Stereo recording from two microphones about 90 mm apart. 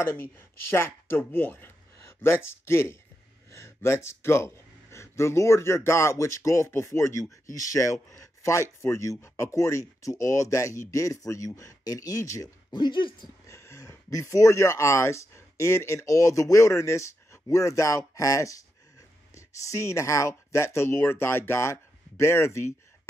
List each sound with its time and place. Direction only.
0.0 s speech: 25° left (ahead or behind)
12.7 s speech: 60° left (ahead or behind)
13.5 s speech: 35° left (ahead or behind)